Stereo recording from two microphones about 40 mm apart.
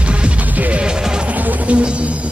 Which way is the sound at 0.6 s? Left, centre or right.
Right.